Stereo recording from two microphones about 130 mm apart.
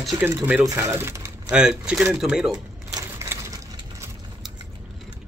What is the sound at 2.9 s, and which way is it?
Sewing machine, 25° right (ahead or behind).